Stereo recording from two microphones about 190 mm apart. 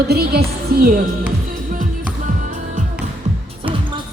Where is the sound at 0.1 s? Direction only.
55° right (ahead or behind).